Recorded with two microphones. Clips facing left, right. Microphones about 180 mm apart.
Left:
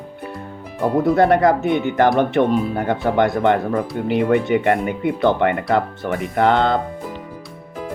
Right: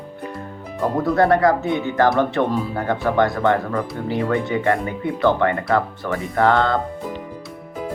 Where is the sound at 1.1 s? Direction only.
25° left (ahead or behind).